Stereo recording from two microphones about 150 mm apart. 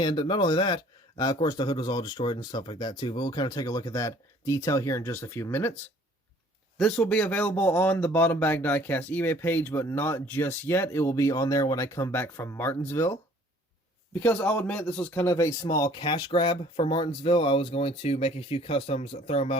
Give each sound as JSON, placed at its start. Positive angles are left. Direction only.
{"t": 0.0, "sound": "a man's voice", "side_deg": 30}
{"t": 6.7, "sound": "a man's voice", "side_deg": 5}
{"t": 15.7, "sound": "speech", "side_deg": 30}